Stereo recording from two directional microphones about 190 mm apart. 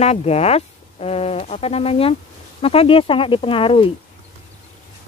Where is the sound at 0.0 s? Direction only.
35° left (ahead or behind).